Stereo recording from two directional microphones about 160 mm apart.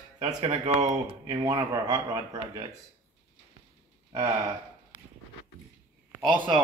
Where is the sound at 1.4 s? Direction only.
20° right (ahead or behind).